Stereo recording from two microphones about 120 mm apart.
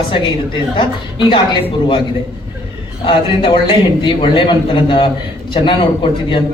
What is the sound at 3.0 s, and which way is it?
A man's voice, 45° left (ahead or behind).